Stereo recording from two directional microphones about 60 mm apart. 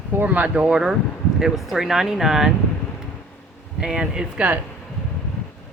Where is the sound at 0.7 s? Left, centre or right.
Centre.